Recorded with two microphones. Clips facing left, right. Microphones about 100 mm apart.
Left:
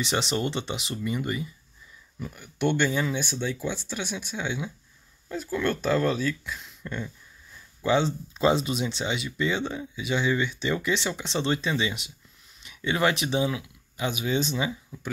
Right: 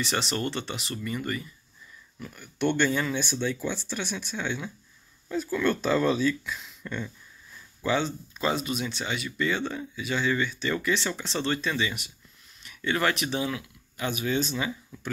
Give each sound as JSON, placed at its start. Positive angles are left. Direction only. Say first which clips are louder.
{"t": 0.0, "sound": "speech", "louder": "left 2 dB", "side_deg": 20}
{"t": 7.8, "sound": "speech", "louder": "left 3 dB", "side_deg": 25}